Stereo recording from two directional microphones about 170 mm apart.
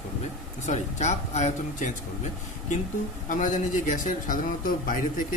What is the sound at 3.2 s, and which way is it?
Speech, 50° left (ahead or behind).